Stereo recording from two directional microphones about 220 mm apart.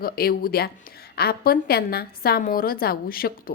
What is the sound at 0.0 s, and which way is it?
A woman's voice, 40° left (ahead or behind).